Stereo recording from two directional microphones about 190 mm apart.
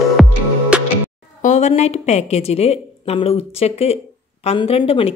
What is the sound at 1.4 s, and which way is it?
A woman's voice, 40° left (ahead or behind).